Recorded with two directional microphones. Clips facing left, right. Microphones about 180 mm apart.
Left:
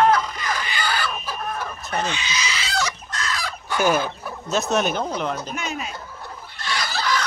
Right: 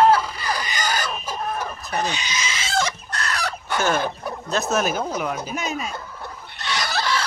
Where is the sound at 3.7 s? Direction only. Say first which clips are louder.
Left 2 dB; 10° left (ahead or behind).